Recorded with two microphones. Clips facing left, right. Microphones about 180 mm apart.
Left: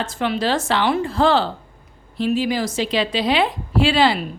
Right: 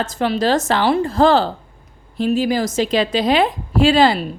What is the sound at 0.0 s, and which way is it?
A woman's voice, 40° right (ahead or behind).